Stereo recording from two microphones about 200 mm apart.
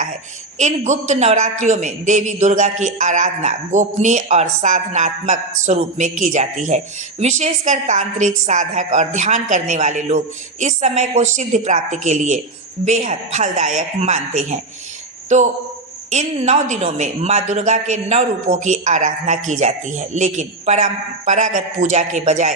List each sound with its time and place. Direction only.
0.6 s a man's voice: 35° right (ahead or behind)